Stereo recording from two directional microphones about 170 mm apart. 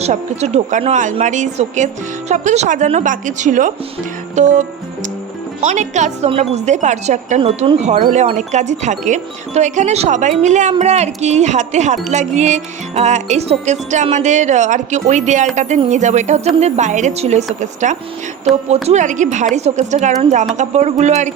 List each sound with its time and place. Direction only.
0.0 s speech: 40° right (ahead or behind)
5.6 s speech: 45° right (ahead or behind)